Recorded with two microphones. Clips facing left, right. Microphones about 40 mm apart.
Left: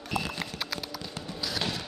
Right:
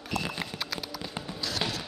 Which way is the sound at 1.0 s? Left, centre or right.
Centre.